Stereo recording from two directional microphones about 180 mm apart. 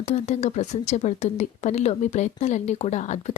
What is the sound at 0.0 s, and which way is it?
Speech, 40° left (ahead or behind).